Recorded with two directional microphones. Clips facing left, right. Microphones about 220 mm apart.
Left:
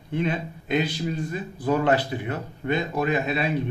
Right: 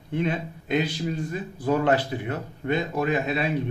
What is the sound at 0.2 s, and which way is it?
Speech, 45° right (ahead or behind).